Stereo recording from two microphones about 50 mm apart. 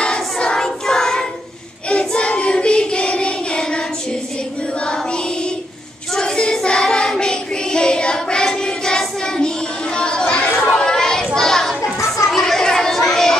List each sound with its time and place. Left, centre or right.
0.0 s choir: centre
1.9 s child singing: centre
6.1 s child singing: centre
9.9 s children playing: centre
11.2 s a sound: centre
12.3 s chatter: centre